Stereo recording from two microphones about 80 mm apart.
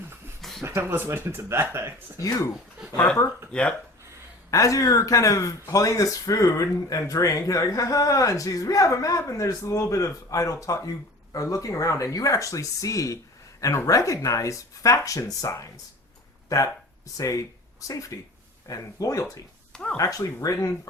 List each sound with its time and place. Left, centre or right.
0.6 s speech: right
2.1 s speech: left
3.5 s speech: centre
4.5 s speech: left
17.2 s speech: left
19.7 s speech: centre
20.0 s speech: left